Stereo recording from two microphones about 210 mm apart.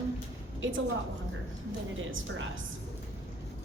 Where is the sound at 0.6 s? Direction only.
70° right (ahead or behind).